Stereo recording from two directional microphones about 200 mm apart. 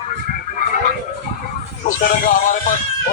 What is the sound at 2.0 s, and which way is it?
Speech, 45° left (ahead or behind).